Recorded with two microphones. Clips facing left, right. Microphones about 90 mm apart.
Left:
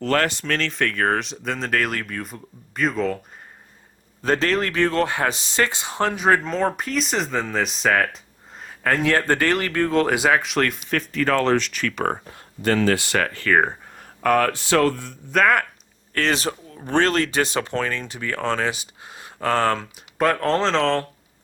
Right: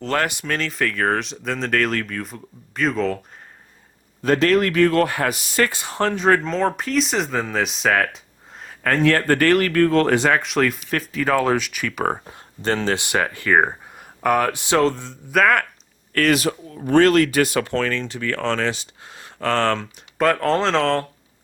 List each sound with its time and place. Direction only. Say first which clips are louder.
0.0 s speech: left 1 dB; 15° right (ahead or behind); by 3.2 s centre (ahead or behind)
4.2 s speech: right 4 dB; 30° left (ahead or behind); by 12.2 s 5° right (ahead or behind)
12.2 s speech: left 1 dB; 30° right (ahead or behind)
15.3 s speech: right 1 dB; centre (ahead or behind)
16.1 s speech: right 4 dB; 25° left (ahead or behind); by 21.1 s centre (ahead or behind)